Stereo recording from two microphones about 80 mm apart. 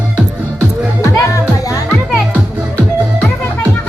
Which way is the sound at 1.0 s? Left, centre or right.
Left.